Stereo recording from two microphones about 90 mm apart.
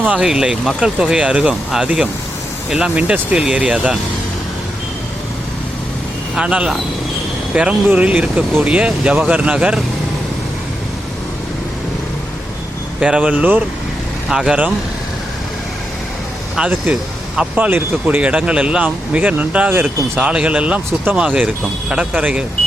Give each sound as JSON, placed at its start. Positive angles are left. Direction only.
{"t": 0.0, "sound": "speech", "side_deg": -10}
{"t": 6.3, "sound": "speech", "side_deg": -10}
{"t": 13.0, "sound": "speech", "side_deg": -15}
{"t": 14.3, "sound": "speech", "side_deg": -5}
{"t": 16.6, "sound": "speech", "side_deg": -15}